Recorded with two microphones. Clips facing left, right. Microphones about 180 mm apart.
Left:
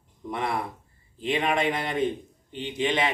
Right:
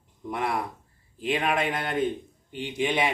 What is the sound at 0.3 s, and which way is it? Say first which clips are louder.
A man's voice: even; 5° right (ahead or behind).